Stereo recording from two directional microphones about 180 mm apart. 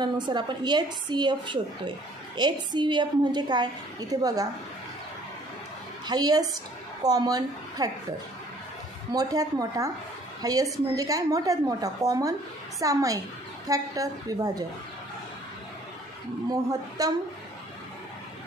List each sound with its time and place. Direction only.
0.0 s a woman's voice: 25° right (ahead or behind)
6.0 s a woman's voice: 20° right (ahead or behind)
9.1 s a woman's voice: 20° right (ahead or behind)
17.0 s a woman's voice: 20° right (ahead or behind)